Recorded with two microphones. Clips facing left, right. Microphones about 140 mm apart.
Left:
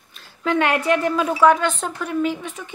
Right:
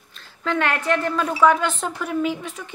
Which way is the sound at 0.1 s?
15° left (ahead or behind).